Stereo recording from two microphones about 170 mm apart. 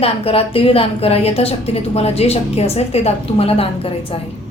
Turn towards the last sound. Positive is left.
turn(degrees=35)  # may be behind; listen again after turning